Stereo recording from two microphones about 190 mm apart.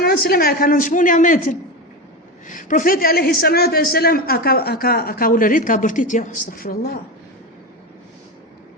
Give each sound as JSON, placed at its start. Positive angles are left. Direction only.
{"t": 0.0, "sound": "a man's voice", "side_deg": 55}